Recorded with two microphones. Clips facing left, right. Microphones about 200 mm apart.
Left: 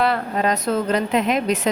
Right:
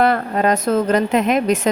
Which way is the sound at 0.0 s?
50° right (ahead or behind).